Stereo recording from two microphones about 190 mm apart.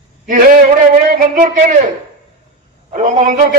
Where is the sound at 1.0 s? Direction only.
45° right (ahead or behind).